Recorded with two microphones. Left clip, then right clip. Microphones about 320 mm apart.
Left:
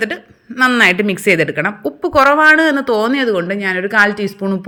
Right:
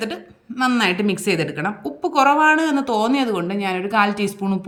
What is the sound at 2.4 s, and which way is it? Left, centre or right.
Speech, right.